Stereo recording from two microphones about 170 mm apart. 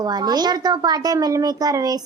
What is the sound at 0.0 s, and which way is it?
A woman's voice, 25° right (ahead or behind).